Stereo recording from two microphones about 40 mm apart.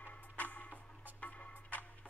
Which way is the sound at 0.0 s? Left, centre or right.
Left.